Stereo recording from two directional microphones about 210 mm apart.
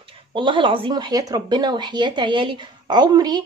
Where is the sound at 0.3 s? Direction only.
25° right (ahead or behind).